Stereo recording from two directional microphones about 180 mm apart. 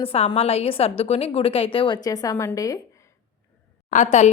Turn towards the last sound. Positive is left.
turn(degrees=45)  # may be behind; listen again after turning